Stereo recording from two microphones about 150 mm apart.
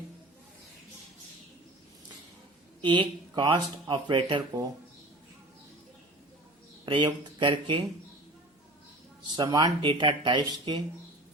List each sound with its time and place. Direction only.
2.8 s speech: 35° right (ahead or behind)
6.8 s speech: 35° right (ahead or behind)
9.3 s speech: 25° right (ahead or behind)